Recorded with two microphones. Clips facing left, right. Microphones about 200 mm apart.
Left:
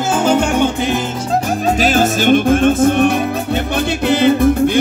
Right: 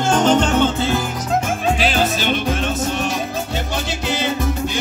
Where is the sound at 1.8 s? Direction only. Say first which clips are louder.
Left 5 dB; 45° left (ahead or behind).